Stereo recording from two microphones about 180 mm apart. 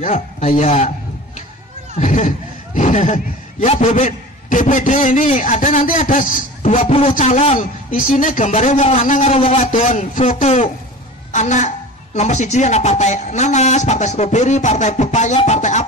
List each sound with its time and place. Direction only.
0.0 s a woman's voice: 45° left (ahead or behind)
2.0 s speech: 45° left (ahead or behind)
6.9 s a woman's voice: 35° left (ahead or behind)